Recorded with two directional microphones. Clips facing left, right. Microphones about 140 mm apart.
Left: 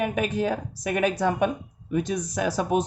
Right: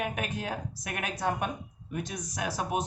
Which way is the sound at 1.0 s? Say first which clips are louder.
Left 8 dB; 90° left.